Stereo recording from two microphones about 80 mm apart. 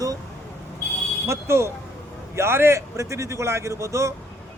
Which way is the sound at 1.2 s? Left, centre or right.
Right.